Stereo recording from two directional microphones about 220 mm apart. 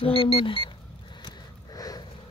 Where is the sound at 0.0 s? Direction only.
25° left (ahead or behind).